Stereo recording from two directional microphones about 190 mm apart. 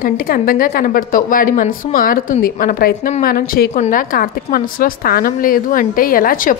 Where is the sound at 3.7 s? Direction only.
40° left (ahead or behind).